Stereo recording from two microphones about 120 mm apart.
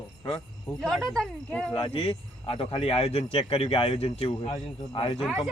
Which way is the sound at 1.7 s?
50° left (ahead or behind).